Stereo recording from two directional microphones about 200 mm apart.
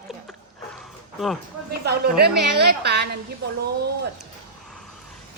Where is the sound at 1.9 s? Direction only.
55° right (ahead or behind).